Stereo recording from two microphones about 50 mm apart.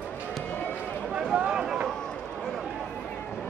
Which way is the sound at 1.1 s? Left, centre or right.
Centre.